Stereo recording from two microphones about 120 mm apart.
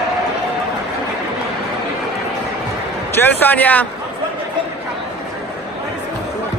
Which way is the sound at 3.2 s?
15° left (ahead or behind).